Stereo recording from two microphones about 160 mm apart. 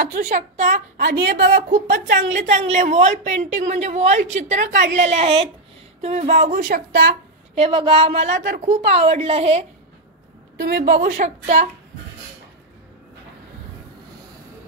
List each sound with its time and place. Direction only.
0.0 s speech: 60° right (ahead or behind)
0.9 s a woman's voice: 70° right (ahead or behind)
7.5 s a woman's voice: 35° right (ahead or behind)
8.4 s a woman's voice: 50° right (ahead or behind)
10.6 s speech: 70° right (ahead or behind); by 11.7 s 45° right (ahead or behind)